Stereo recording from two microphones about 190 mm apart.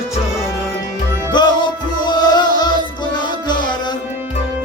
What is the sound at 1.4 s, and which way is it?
Music, 25° left (ahead or behind).